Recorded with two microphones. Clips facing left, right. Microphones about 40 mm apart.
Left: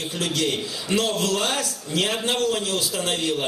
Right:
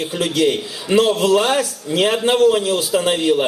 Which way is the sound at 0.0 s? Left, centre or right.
Centre.